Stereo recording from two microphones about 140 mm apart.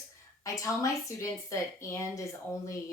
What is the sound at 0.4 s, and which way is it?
Speech, 25° left (ahead or behind).